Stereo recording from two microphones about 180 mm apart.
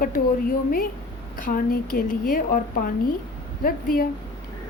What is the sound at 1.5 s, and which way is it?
A woman's voice, 50° left (ahead or behind).